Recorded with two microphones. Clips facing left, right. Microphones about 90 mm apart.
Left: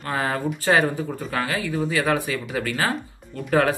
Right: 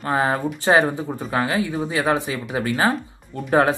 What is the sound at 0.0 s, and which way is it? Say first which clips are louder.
Speech: right 4 dB; 25° right (ahead or behind).